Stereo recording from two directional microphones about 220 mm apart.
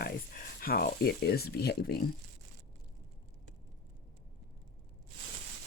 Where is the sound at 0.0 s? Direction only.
40° left (ahead or behind).